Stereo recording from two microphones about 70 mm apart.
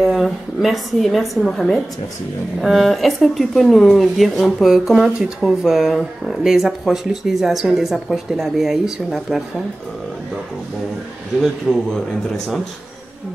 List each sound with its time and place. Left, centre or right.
0.0 s speech: centre
11.7 s speech: centre